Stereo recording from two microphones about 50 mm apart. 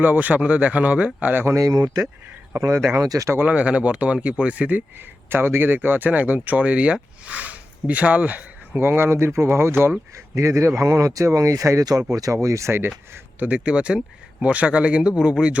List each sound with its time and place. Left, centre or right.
0.0 s speech: right
1.5 s speech: right
3.4 s speech: right
4.9 s speech: right
8.8 s speech: right
10.3 s speech: right
13.4 s speech: right